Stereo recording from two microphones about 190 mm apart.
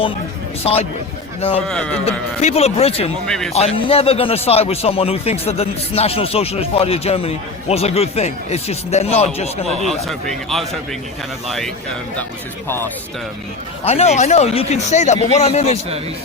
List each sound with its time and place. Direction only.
0.6 s a man's voice: 30° left (ahead or behind)
1.6 s speech: 5° left (ahead or behind)
2.0 s a man's voice: 35° left (ahead or behind)
3.2 s speech: centre (ahead or behind)
3.5 s a man's voice: 30° left (ahead or behind)
9.6 s speech: centre (ahead or behind)
13.8 s a man's voice: 35° left (ahead or behind)